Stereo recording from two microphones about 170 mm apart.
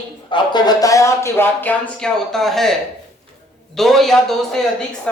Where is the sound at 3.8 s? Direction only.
Centre (ahead or behind).